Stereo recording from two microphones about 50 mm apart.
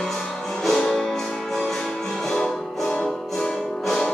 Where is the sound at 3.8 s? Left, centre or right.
Centre.